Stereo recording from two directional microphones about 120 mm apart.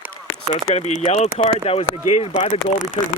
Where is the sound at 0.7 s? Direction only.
65° left (ahead or behind).